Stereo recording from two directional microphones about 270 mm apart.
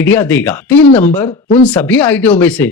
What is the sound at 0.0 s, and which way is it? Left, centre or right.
Speech, centre.